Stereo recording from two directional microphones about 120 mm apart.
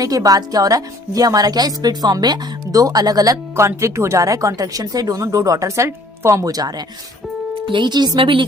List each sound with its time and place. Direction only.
0.0 s a woman's voice: 30° right (ahead or behind)
3.5 s speech: 20° right (ahead or behind); by 8.4 s 45° right (ahead or behind)